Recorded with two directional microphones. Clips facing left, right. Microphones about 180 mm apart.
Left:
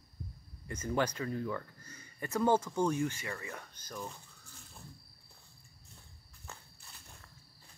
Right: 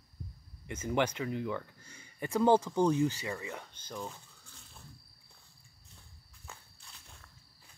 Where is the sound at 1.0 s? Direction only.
20° right (ahead or behind).